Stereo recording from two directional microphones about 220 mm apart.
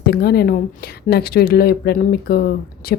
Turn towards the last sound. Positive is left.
turn(degrees=45)  # may be behind; listen again after turning